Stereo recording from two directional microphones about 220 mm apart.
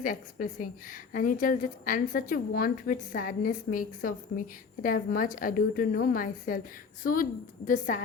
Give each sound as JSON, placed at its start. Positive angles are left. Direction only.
{"t": 0.0, "sound": "a woman's voice", "side_deg": 40}